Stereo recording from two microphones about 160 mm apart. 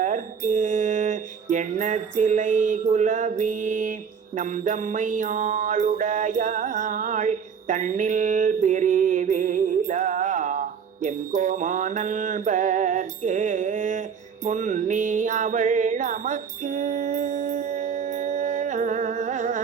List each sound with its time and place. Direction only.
0.0 s mantra: 50° right (ahead or behind)
4.4 s music: 50° right (ahead or behind)